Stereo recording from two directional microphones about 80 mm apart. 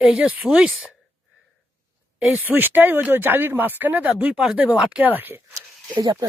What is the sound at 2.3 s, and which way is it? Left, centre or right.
Speech, right.